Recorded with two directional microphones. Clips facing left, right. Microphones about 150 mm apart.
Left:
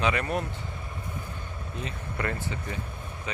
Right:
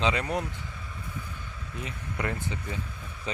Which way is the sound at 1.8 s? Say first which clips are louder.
Even; 15° right (ahead or behind).